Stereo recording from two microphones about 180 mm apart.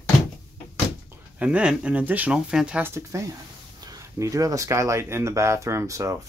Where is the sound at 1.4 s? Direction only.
5° right (ahead or behind).